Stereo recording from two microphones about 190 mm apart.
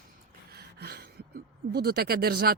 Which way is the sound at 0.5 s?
55° right (ahead or behind).